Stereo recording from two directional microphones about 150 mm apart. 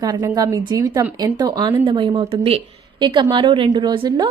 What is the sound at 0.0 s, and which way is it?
A woman's voice, 25° right (ahead or behind).